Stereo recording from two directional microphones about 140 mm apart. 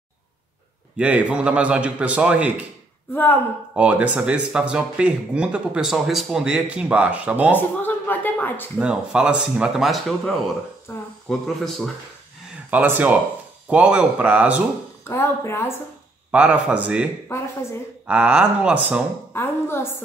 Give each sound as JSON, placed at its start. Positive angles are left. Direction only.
{"t": 0.9, "sound": "speech", "side_deg": -10}
{"t": 3.7, "sound": "speech", "side_deg": -10}
{"t": 7.5, "sound": "speech", "side_deg": 15}
{"t": 8.7, "sound": "speech", "side_deg": -5}
{"t": 10.9, "sound": "a sound", "side_deg": 20}
{"t": 11.2, "sound": "speech", "side_deg": 5}
{"t": 12.7, "sound": "speech", "side_deg": -10}
{"t": 15.0, "sound": "speech", "side_deg": 20}
{"t": 16.3, "sound": "speech", "side_deg": -10}
{"t": 17.3, "sound": "speech", "side_deg": 20}
{"t": 18.0, "sound": "speech", "side_deg": -10}
{"t": 19.3, "sound": "a woman's voice", "side_deg": 15}